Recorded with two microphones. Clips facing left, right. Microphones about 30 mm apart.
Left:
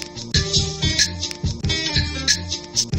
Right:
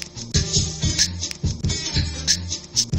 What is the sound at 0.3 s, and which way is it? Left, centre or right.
Music, left.